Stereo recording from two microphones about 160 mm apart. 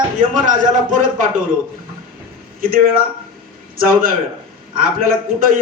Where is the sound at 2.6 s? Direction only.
65° right (ahead or behind).